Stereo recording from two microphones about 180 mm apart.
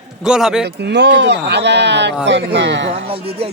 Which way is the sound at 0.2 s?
5° right (ahead or behind).